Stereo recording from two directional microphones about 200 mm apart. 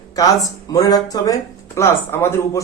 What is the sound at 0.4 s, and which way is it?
Speech, 20° left (ahead or behind).